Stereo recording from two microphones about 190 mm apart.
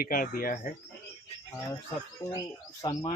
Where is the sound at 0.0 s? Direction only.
50° left (ahead or behind).